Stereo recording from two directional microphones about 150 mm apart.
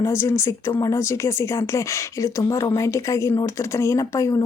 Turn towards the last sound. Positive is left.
turn(degrees=20)  # may be behind; listen again after turning